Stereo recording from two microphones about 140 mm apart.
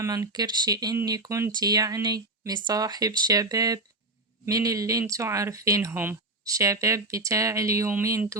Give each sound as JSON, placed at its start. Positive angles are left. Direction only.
{"t": 0.0, "sound": "speech", "side_deg": -25}